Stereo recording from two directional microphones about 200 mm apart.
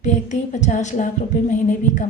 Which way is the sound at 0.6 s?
35° left (ahead or behind).